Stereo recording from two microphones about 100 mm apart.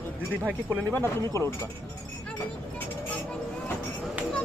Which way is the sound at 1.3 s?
30° left (ahead or behind).